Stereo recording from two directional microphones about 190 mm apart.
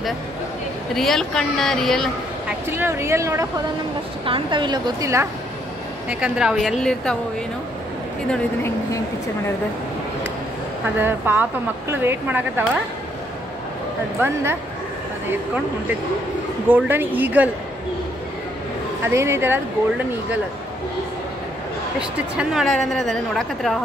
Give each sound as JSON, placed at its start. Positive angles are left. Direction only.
{"t": 0.9, "sound": "a woman's voice", "side_deg": 0}
{"t": 2.7, "sound": "a woman's voice", "side_deg": -15}
{"t": 6.0, "sound": "a woman's voice", "side_deg": -5}
{"t": 8.3, "sound": "speech", "side_deg": 10}
{"t": 11.0, "sound": "speech", "side_deg": -10}
{"t": 14.2, "sound": "speech", "side_deg": -10}
{"t": 16.6, "sound": "speech", "side_deg": -10}
{"t": 19.0, "sound": "speech", "side_deg": -15}
{"t": 22.4, "sound": "a woman's voice", "side_deg": 0}